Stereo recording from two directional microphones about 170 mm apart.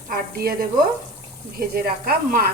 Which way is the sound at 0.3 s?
60° right (ahead or behind).